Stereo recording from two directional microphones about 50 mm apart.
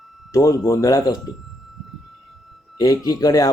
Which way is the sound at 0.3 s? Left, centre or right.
Left.